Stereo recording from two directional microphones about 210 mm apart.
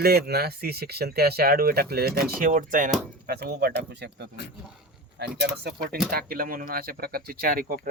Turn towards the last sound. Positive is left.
turn(degrees=-40)  # may be behind; listen again after turning